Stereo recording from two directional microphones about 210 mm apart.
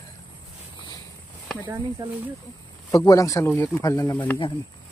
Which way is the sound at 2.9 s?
15° left (ahead or behind).